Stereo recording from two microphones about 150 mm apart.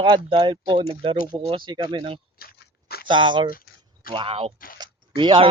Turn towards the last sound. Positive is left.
turn(degrees=-35)  # may be behind; listen again after turning